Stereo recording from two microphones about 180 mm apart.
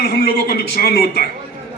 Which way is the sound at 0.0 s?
60° left (ahead or behind).